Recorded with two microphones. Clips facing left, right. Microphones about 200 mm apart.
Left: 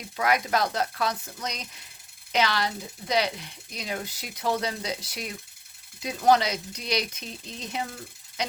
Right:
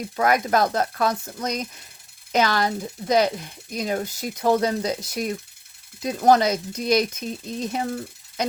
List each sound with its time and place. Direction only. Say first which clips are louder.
0.2 s speech: right 5 dB; 45° right (ahead or behind)